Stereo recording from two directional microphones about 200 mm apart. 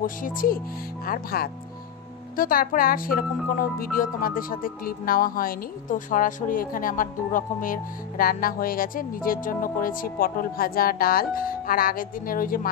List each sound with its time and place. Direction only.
0.0 s speech: 45° left (ahead or behind)